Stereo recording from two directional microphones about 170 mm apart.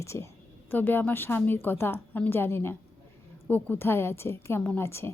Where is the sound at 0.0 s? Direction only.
15° left (ahead or behind).